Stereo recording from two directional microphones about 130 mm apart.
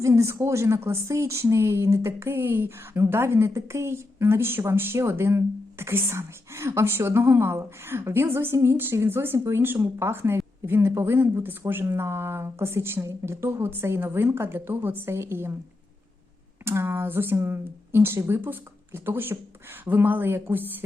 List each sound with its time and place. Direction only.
0.0 s speech: 25° right (ahead or behind)
16.6 s speech: 15° right (ahead or behind)